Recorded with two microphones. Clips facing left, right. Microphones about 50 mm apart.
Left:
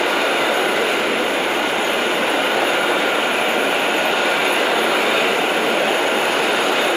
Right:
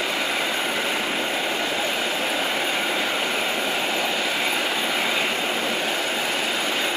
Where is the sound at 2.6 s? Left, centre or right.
Left.